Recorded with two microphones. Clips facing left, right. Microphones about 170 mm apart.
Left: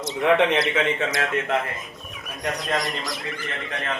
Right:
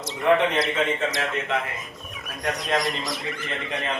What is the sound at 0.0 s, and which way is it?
Speech, centre (ahead or behind).